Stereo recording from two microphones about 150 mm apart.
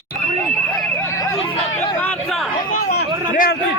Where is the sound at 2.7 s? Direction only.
80° left.